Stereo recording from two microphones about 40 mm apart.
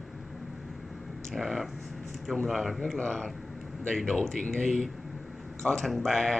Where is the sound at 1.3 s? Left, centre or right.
Centre.